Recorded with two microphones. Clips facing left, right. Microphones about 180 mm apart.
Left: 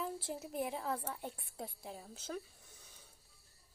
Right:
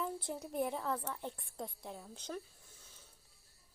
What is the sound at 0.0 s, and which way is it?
Speech, 5° left (ahead or behind).